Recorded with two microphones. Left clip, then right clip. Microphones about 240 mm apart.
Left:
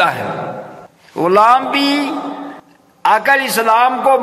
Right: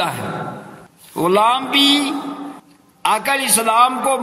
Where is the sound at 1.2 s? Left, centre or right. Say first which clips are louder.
Left 5 dB; right.